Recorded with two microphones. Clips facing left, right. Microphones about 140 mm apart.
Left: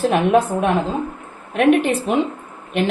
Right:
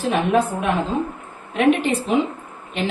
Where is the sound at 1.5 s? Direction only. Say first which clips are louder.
Left 2 dB; 60° left (ahead or behind).